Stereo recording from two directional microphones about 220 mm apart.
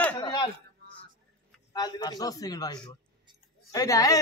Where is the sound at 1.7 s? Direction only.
20° left (ahead or behind).